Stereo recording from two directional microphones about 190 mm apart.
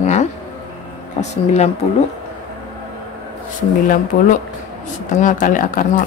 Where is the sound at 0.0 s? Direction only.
35° left (ahead or behind).